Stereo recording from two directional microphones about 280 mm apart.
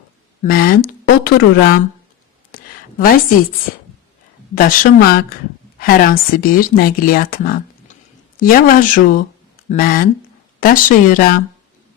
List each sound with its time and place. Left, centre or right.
0.4 s speech: left
2.5 s a sound: left
4.5 s speech: left